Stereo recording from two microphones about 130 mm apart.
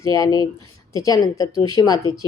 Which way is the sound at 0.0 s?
25° left (ahead or behind).